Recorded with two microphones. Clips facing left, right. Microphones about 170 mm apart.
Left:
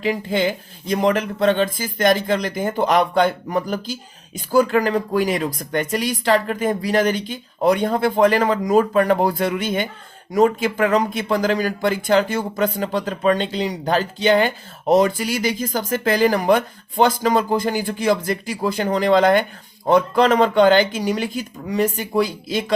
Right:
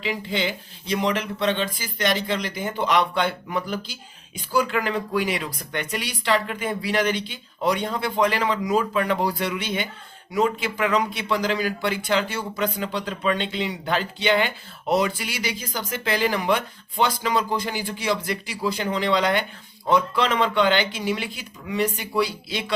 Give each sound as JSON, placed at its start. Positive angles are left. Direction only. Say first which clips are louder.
{"t": 0.0, "sound": "speech", "louder": "left 6 dB", "side_deg": 45}